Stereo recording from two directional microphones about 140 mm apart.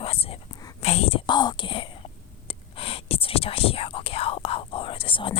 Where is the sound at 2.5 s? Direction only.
40° left (ahead or behind).